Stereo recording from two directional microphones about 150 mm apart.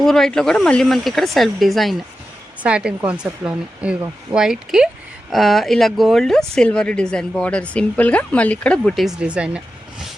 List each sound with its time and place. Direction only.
0.0 s speech: 5° left (ahead or behind)